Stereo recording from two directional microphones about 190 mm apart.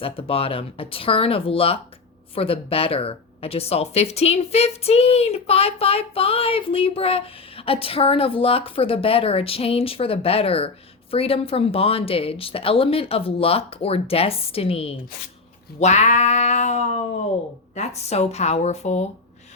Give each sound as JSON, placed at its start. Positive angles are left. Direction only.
{"t": 0.0, "sound": "speech", "side_deg": 30}